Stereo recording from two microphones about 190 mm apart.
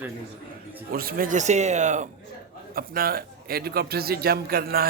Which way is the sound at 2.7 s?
50° right (ahead or behind).